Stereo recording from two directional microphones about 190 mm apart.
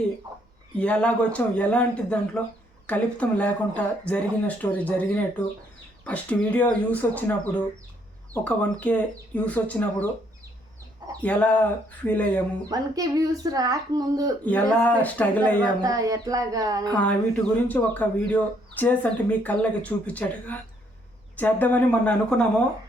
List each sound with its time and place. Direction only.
0.8 s speech: 5° left (ahead or behind)
11.2 s speech: 10° left (ahead or behind)
12.7 s a woman's voice: 20° right (ahead or behind)
14.4 s speech: 10° left (ahead or behind)
15.8 s a woman's voice: 20° right (ahead or behind)
16.9 s speech: 5° left (ahead or behind)